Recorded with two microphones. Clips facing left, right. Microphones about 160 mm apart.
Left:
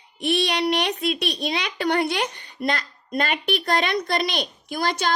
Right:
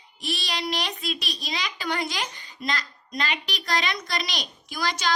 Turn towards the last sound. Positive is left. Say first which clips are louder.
# left 3 dB
turn(degrees=55)  # may be behind; listen again after turning